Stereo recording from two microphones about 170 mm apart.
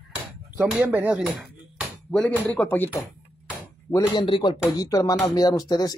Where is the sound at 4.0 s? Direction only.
30° left (ahead or behind).